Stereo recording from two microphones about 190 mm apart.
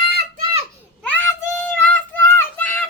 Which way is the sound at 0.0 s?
55° right (ahead or behind).